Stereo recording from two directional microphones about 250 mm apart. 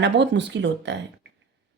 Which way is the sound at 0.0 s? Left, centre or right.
Right.